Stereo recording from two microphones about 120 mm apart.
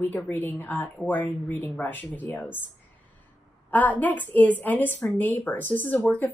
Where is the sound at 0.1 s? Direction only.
15° left (ahead or behind).